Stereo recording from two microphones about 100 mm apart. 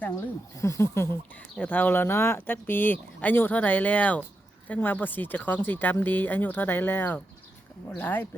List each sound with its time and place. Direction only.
0.6 s speech: 30° left (ahead or behind)
1.5 s speech: 15° left (ahead or behind)